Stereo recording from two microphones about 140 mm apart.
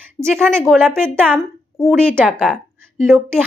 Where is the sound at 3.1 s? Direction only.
Centre (ahead or behind).